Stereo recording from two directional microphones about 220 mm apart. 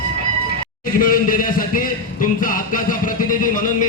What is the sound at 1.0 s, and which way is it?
A man's voice, 40° left (ahead or behind).